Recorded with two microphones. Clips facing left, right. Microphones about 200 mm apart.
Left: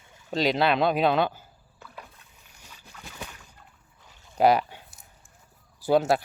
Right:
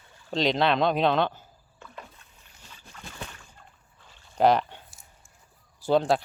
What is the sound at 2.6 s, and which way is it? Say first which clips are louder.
Boat: right 1 dB; 10° left (ahead or behind).